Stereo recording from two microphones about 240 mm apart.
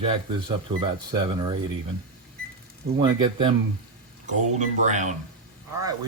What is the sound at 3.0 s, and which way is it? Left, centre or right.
Speech, centre.